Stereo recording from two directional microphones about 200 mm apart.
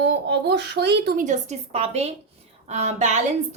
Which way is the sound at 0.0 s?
60° right (ahead or behind).